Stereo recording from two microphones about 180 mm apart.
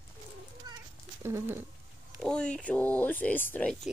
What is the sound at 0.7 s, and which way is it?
Children playing, 25° right (ahead or behind).